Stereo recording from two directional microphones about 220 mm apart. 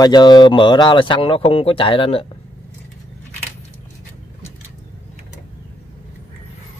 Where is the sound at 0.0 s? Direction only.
20° left (ahead or behind).